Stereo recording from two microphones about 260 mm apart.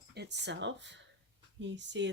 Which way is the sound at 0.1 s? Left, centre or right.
Right.